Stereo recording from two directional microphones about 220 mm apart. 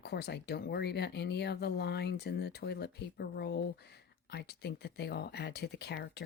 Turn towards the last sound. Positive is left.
turn(degrees=50)  # may be behind; listen again after turning